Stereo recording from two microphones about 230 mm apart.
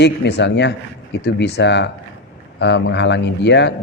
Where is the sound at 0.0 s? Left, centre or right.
Left.